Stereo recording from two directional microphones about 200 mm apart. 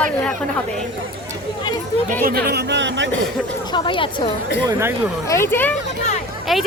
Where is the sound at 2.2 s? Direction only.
50° right (ahead or behind).